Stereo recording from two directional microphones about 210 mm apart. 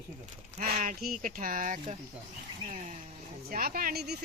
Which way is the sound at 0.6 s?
35° right (ahead or behind).